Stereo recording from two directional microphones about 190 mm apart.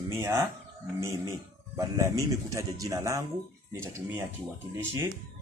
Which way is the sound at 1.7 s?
15° right (ahead or behind).